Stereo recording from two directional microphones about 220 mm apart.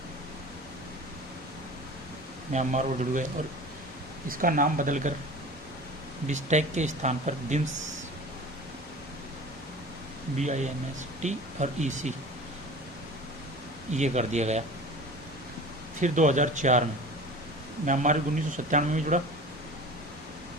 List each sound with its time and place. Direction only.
2.5 s speech: 30° right (ahead or behind)
4.3 s speech: 40° right (ahead or behind)
6.2 s speech: 30° right (ahead or behind)
10.3 s speech: 30° right (ahead or behind)
13.9 s speech: 30° right (ahead or behind)
16.0 s speech: 35° right (ahead or behind)